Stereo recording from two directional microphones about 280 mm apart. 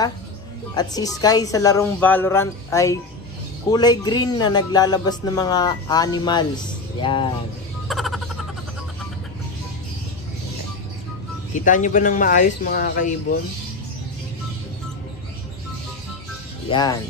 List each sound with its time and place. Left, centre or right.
0.7 s speech: centre
7.9 s a sound: centre
11.6 s speech: left
16.6 s speech: centre